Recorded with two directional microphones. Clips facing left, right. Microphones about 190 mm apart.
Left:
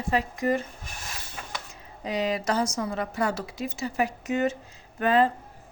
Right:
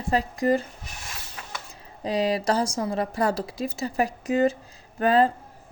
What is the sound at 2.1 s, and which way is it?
A woman's voice, 35° right (ahead or behind).